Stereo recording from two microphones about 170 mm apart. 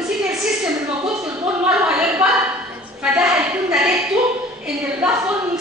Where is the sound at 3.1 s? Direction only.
5° right (ahead or behind).